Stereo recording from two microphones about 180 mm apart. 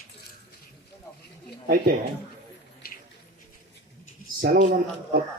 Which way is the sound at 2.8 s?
55° left (ahead or behind).